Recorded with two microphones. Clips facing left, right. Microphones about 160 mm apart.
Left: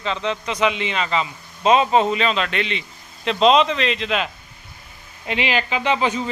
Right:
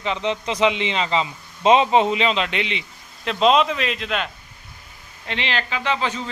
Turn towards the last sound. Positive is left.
turn(degrees=15)  # may be behind; listen again after turning